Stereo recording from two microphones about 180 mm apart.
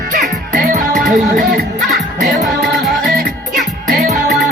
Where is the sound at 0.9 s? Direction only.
Centre (ahead or behind).